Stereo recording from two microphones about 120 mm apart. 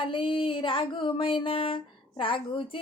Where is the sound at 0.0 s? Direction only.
45° left (ahead or behind).